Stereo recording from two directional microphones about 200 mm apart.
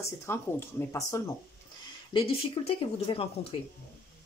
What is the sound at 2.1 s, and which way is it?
A woman's voice, 25° left (ahead or behind).